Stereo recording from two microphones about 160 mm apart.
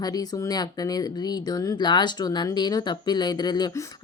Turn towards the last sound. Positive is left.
turn(degrees=25)  # may be behind; listen again after turning